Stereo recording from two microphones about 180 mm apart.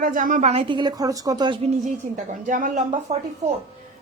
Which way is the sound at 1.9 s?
45° right (ahead or behind).